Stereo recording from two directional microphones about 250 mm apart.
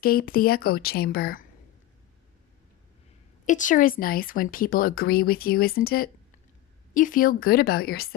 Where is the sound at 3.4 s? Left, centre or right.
Left.